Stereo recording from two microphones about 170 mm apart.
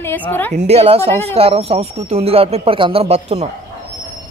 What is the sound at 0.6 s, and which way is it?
Speech, 40° right (ahead or behind).